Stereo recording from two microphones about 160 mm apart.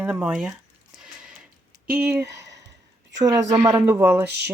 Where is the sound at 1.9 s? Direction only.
10° right (ahead or behind).